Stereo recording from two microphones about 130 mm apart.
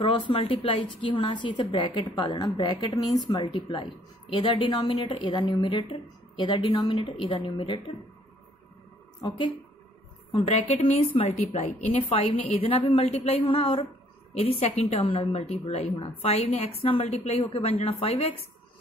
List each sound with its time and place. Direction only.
0.0 s a woman's voice: 40° left (ahead or behind)
10.5 s a woman's voice: 55° left (ahead or behind)